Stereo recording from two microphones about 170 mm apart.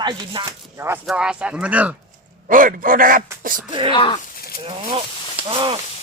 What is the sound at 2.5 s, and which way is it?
Speech, 50° right (ahead or behind).